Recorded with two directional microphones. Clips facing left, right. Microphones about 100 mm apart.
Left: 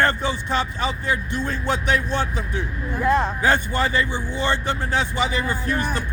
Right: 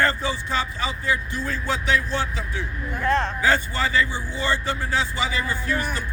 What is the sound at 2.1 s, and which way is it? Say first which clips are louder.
Speech: left 2 dB; 20° left (ahead or behind).